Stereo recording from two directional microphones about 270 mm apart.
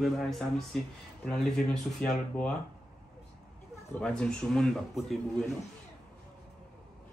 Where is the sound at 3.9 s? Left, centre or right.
Centre.